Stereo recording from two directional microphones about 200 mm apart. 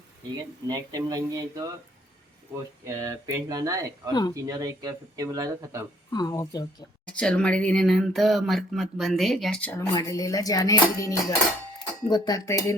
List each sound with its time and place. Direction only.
0.7 s speech: 20° right (ahead or behind)
2.8 s speech: 15° right (ahead or behind)
4.1 s speech: 20° left (ahead or behind)
4.4 s speech: 20° right (ahead or behind)
6.1 s speech: 20° left (ahead or behind)
7.0 s speech: 5° left (ahead or behind)
9.9 s dishes: 15° left (ahead or behind)
12.0 s speech: 20° left (ahead or behind)